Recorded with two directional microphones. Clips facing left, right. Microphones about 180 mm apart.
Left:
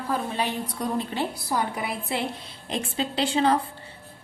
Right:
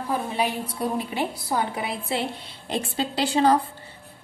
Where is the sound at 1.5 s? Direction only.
25° right (ahead or behind).